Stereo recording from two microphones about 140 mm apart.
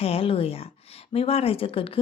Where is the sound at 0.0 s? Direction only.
45° left (ahead or behind).